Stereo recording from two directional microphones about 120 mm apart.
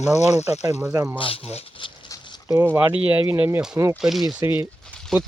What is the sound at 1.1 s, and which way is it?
Speech, 50° left (ahead or behind).